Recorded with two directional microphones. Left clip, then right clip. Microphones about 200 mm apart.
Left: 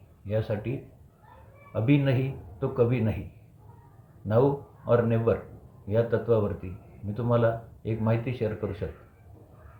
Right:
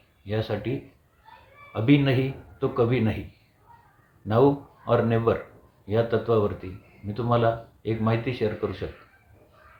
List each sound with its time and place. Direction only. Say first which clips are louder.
0.3 s speech: right 1 dB; 10° right (ahead or behind)
1.7 s speech: right 4 dB; 10° right (ahead or behind)
4.9 s speech: right 1 dB; 10° right (ahead or behind)